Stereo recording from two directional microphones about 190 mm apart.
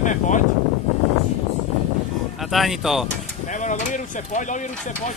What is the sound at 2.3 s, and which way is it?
Speech, centre (ahead or behind).